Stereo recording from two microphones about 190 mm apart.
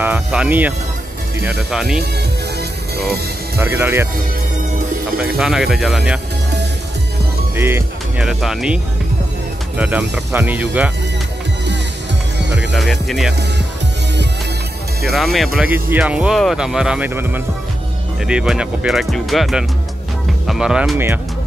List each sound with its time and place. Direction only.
0.0 s speech: 10° right (ahead or behind)
3.5 s speech: 10° right (ahead or behind)
5.1 s speech: 5° right (ahead or behind)
7.5 s speech: 10° right (ahead or behind)
9.8 s speech: 10° right (ahead or behind)
12.5 s speech: centre (ahead or behind)
15.0 s speech: centre (ahead or behind)